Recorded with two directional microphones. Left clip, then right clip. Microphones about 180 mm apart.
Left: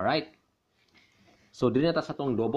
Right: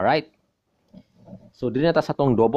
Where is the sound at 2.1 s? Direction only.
40° right (ahead or behind).